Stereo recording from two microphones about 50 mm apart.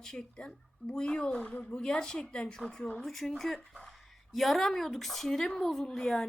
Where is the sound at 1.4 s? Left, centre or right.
Left.